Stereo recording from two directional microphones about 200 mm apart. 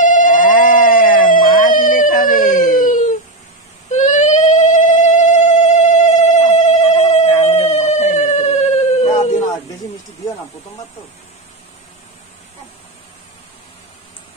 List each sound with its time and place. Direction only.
0.0 s ringtone: 40° left (ahead or behind)
1.3 s cat: 45° left (ahead or behind)
3.9 s a sound: 35° left (ahead or behind)